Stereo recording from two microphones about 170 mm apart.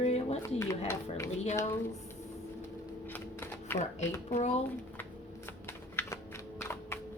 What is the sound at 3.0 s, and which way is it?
Typewriter, 10° left (ahead or behind).